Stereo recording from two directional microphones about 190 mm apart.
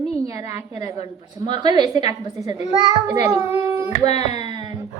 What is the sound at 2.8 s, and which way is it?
A child's voice, 20° right (ahead or behind).